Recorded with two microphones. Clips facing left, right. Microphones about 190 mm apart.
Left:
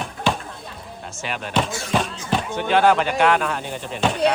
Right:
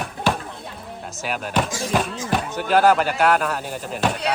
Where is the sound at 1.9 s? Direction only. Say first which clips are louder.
Even; 5° right (ahead or behind).